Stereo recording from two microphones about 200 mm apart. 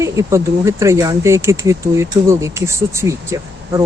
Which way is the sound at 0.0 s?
15° right (ahead or behind).